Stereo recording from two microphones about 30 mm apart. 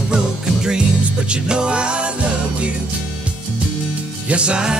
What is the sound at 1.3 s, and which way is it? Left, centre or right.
Music, right.